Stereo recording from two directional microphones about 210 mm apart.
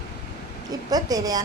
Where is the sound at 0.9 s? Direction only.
15° right (ahead or behind).